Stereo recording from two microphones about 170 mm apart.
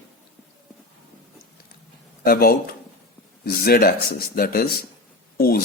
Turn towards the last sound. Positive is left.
turn(degrees=65)  # may be behind; listen again after turning